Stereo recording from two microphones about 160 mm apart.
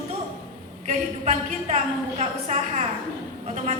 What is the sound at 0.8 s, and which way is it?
Speech, 50° right (ahead or behind).